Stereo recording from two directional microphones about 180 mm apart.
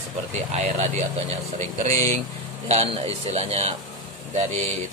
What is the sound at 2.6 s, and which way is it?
Speech, 35° right (ahead or behind).